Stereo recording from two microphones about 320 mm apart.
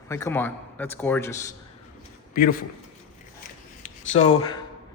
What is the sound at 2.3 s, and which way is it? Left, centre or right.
Speech, left.